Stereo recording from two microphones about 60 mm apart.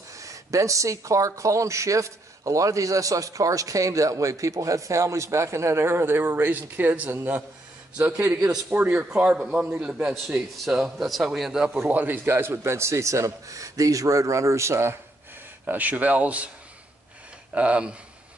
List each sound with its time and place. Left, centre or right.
0.2 s speech: right
8.6 s a man's voice: right
9.4 s a man's voice: centre
11.9 s a man's voice: right
12.3 s speech: right
15.6 s a man's voice: right
17.6 s a man's voice: centre